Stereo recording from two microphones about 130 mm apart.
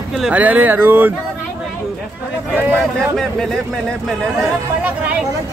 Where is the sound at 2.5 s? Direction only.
15° right (ahead or behind).